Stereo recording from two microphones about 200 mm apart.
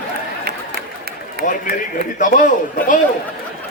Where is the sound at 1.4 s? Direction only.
40° left (ahead or behind).